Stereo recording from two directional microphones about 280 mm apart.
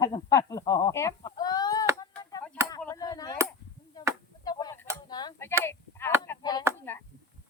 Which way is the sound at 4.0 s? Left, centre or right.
Centre.